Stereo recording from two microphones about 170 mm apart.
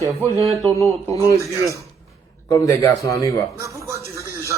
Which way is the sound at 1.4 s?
15° right (ahead or behind).